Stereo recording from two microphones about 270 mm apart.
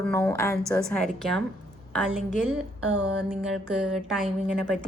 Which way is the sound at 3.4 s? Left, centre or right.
Centre.